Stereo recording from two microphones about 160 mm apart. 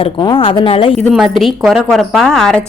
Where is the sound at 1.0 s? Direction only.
Centre (ahead or behind).